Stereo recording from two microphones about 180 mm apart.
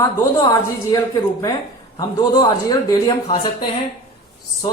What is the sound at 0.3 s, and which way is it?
Speech, 20° left (ahead or behind).